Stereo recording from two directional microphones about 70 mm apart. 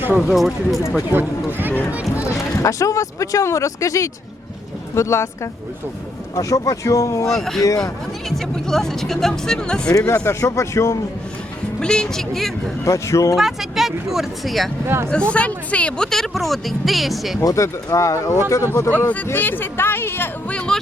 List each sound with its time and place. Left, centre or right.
0.3 s speech: centre
1.5 s a sound: right
2.2 s speech: left
7.3 s speech: centre
10.2 s speech: left
11.8 s speech: centre
12.8 s speech: left
13.3 s speech: centre
14.8 s speech: right
15.1 s speech: centre
17.4 s speech: left
18.9 s speech: left
20.5 s a sound: centre